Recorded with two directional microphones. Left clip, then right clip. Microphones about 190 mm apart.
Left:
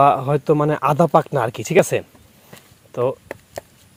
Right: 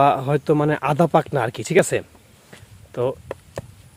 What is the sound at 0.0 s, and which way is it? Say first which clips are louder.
Speech: left 2 dB; 10° right (ahead or behind).